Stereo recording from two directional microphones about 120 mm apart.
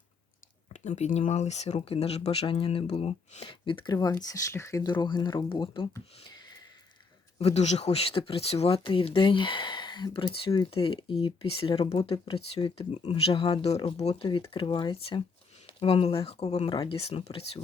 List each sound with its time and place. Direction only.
0.7 s speech: 70° left (ahead or behind); by 3.9 s 45° left (ahead or behind)
3.9 s speech: 30° left (ahead or behind); by 5.9 s 45° left (ahead or behind)
6.2 s a sound: 35° left (ahead or behind)
7.3 s speech: 60° left (ahead or behind)
12.1 s speech: 40° left (ahead or behind)
14.0 s speech: 60° left (ahead or behind)
14.3 s speech: 45° left (ahead or behind)
15.6 s speech: 55° left (ahead or behind)
16.6 s speech: 40° left (ahead or behind)
17.0 s speech: 55° left (ahead or behind)